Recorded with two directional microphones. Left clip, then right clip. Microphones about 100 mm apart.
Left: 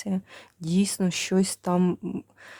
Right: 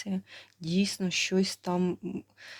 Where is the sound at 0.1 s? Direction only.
65° left (ahead or behind).